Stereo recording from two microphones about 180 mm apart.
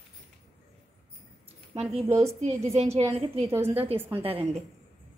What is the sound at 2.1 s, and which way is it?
Speech, 15° right (ahead or behind).